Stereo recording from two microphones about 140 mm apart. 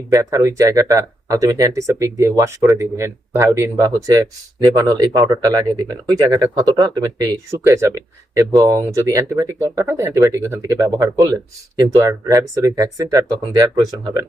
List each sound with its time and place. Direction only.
0.1 s speech: 25° right (ahead or behind)